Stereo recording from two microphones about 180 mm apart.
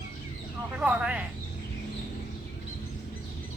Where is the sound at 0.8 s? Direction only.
5° right (ahead or behind).